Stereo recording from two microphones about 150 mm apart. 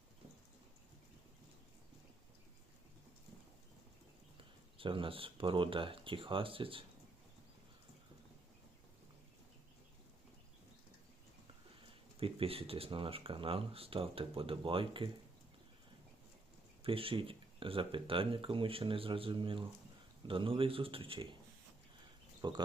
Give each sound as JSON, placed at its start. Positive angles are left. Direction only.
{"t": 4.8, "sound": "speech", "side_deg": -35}
{"t": 12.2, "sound": "speech", "side_deg": -40}
{"t": 16.8, "sound": "speech", "side_deg": -35}
{"t": 22.4, "sound": "speech", "side_deg": -30}